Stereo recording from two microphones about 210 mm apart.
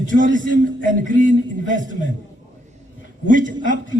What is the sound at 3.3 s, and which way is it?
Speech, 40° right (ahead or behind).